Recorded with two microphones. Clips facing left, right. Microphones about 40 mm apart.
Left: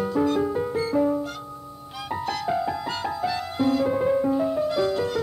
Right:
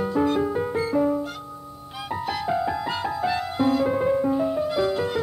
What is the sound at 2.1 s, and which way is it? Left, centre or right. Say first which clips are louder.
Music: even; centre.